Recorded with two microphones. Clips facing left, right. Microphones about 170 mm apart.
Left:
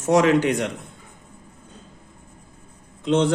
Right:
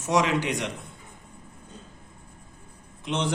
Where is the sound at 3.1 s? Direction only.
55° left (ahead or behind).